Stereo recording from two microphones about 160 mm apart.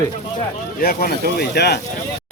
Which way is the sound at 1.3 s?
90° left.